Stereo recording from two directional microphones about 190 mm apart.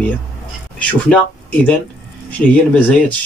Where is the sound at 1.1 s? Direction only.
5° left (ahead or behind).